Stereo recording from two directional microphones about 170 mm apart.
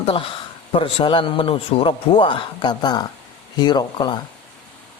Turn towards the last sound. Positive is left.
turn(degrees=25)  # may be behind; listen again after turning